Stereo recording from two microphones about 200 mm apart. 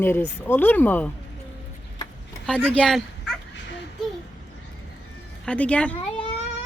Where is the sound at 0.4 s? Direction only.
10° left (ahead or behind).